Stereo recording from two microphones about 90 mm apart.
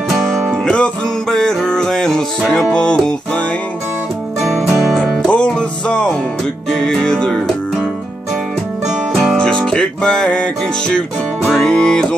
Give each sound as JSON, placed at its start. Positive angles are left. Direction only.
{"t": 0.7, "sound": "music", "side_deg": 10}
{"t": 4.4, "sound": "music", "side_deg": -5}
{"t": 9.1, "sound": "music", "side_deg": -5}
{"t": 9.4, "sound": "music", "side_deg": 10}